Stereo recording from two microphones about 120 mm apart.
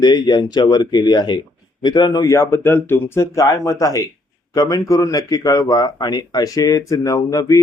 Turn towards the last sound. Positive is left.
turn(degrees=30)  # may be behind; listen again after turning